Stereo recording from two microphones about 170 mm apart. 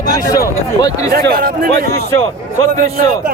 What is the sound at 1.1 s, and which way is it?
Speech, 60° right (ahead or behind).